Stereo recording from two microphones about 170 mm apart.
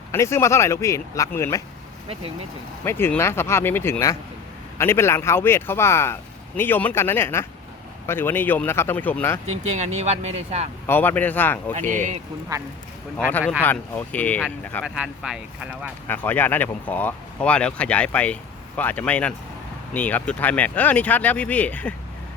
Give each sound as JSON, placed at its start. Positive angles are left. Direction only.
{"t": 0.1, "sound": "speech", "side_deg": 15}
{"t": 2.8, "sound": "speech", "side_deg": 15}
{"t": 9.7, "sound": "speech", "side_deg": -40}
{"t": 10.8, "sound": "speech", "side_deg": 10}
{"t": 11.9, "sound": "speech", "side_deg": -45}
{"t": 13.6, "sound": "speech", "side_deg": 10}
{"t": 14.8, "sound": "speech", "side_deg": -5}
{"t": 16.0, "sound": "speech", "side_deg": 10}